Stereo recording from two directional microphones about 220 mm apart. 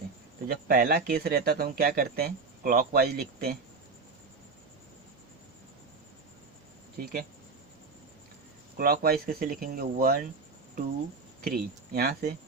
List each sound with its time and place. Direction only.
0.4 s speech: 40° right (ahead or behind)
7.0 s speech: 40° right (ahead or behind)
8.8 s speech: 40° right (ahead or behind)
11.4 s speech: 40° right (ahead or behind)